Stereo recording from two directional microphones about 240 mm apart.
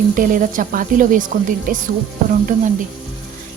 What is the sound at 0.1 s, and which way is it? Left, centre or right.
Speech, right.